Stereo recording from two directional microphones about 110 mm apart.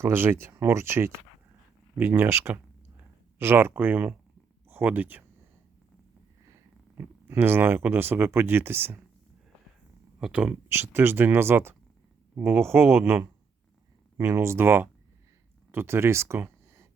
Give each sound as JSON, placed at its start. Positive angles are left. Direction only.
{"t": 0.0, "sound": "speech", "side_deg": -20}
{"t": 6.9, "sound": "speech", "side_deg": -20}
{"t": 10.2, "sound": "speech", "side_deg": -10}
{"t": 10.7, "sound": "speech", "side_deg": -20}